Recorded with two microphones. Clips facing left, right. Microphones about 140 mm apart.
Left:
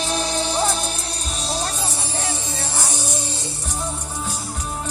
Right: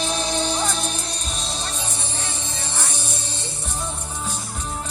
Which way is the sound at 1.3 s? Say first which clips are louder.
Left 8 dB; 35° left (ahead or behind).